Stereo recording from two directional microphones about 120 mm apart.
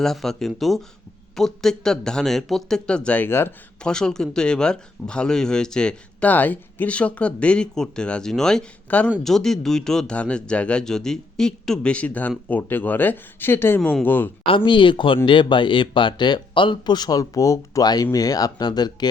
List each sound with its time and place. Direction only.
0.0 s speech: 5° left (ahead or behind); by 3.5 s 20° left (ahead or behind)
3.8 s speech: 5° left (ahead or behind)
14.4 s speech: 45° left (ahead or behind)